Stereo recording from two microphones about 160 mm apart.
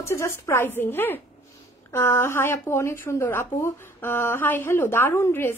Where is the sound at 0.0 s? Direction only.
15° left (ahead or behind).